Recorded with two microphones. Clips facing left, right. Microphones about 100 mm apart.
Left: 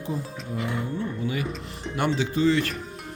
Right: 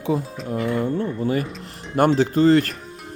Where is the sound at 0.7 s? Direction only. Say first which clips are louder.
Right 9 dB; 55° right (ahead or behind).